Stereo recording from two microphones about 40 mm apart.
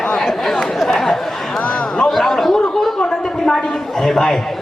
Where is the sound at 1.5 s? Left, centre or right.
Left.